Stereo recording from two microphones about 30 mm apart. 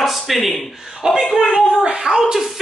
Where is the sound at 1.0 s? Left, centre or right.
Centre.